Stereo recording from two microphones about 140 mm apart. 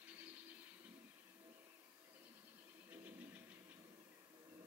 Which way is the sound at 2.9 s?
10° right (ahead or behind).